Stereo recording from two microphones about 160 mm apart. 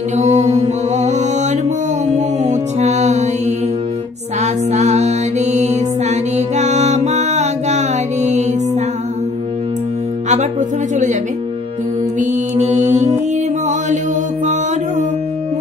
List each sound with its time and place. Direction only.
0.2 s mantra: 45° right (ahead or behind)
0.9 s music: 45° right (ahead or behind)
12.2 s mantra: 45° right (ahead or behind)
14.4 s music: 50° right (ahead or behind)